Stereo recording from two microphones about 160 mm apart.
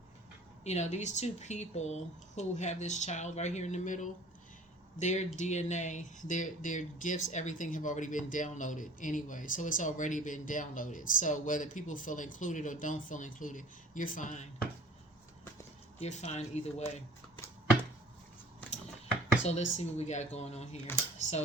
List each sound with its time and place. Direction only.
0.6 s speech: 45° left (ahead or behind)
16.0 s speech: 45° left (ahead or behind)
19.5 s speech: 40° left (ahead or behind)